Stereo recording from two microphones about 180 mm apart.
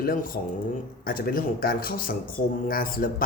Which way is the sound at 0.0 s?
50° left (ahead or behind).